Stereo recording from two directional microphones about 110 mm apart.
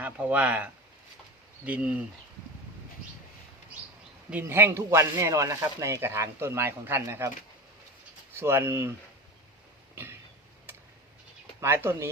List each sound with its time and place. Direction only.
0.0 s speech: 15° right (ahead or behind)
4.3 s speech: 20° right (ahead or behind)
8.3 s speech: 20° right (ahead or behind)
9.9 s a sound: 25° right (ahead or behind)
11.6 s speech: 20° right (ahead or behind)